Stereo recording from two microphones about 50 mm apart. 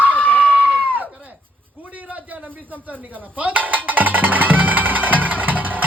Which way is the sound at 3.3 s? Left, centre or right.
Right.